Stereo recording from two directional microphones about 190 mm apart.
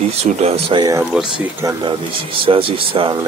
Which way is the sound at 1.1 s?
10° right (ahead or behind).